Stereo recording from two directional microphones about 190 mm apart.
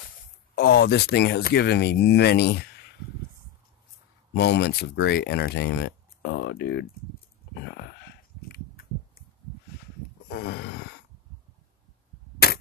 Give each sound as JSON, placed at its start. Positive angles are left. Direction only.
{"t": 0.6, "sound": "speech", "side_deg": 60}
{"t": 4.3, "sound": "speech", "side_deg": 60}
{"t": 10.3, "sound": "a sound", "side_deg": 60}